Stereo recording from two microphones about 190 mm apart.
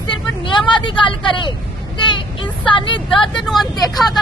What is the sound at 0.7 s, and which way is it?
Speech, 25° left (ahead or behind).